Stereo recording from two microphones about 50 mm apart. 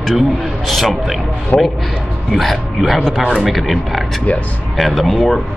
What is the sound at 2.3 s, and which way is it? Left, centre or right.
Speech, centre.